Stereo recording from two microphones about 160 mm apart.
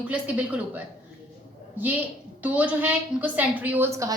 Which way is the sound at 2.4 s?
10° right (ahead or behind).